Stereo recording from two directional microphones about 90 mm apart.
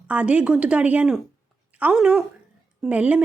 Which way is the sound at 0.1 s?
15° right (ahead or behind).